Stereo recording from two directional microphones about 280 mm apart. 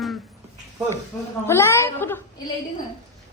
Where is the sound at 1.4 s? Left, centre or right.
Centre.